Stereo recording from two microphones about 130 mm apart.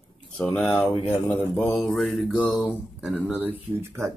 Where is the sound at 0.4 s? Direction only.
5° left (ahead or behind); by 4.0 s 10° right (ahead or behind).